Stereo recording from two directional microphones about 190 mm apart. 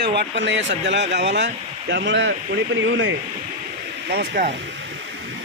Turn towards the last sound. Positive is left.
turn(degrees=-55)  # may be behind; listen again after turning